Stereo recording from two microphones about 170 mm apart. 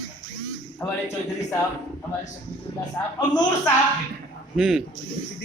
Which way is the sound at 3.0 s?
15° left (ahead or behind).